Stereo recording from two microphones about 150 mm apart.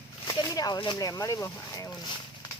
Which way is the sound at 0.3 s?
25° left (ahead or behind).